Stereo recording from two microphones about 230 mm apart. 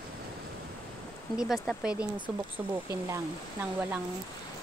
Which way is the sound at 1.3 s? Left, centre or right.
Centre.